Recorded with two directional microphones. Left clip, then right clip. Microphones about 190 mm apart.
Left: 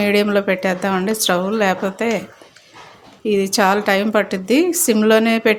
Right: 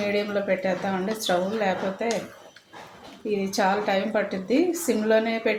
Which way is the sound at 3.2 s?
45° left (ahead or behind).